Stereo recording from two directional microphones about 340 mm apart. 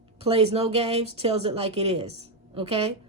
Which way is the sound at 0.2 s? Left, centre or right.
Centre.